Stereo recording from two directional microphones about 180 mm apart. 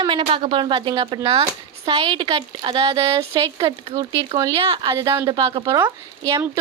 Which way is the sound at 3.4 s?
20° right (ahead or behind).